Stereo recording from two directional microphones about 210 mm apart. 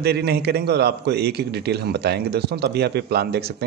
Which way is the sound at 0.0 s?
50° right (ahead or behind).